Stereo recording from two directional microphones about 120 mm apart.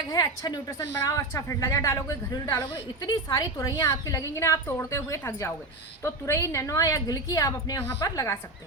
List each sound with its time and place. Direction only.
0.1 s a woman's voice: 35° left (ahead or behind)